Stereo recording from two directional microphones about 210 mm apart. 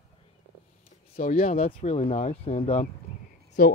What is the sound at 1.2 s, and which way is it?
Speech, 35° left (ahead or behind).